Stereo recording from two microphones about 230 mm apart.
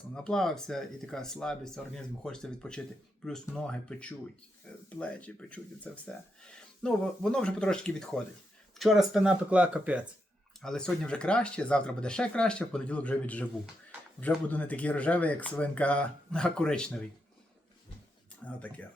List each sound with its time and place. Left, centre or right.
0.2 s speech: centre
18.4 s speech: centre